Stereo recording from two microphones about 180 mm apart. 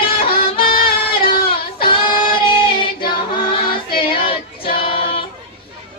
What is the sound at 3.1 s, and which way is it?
Choir, 25° left (ahead or behind).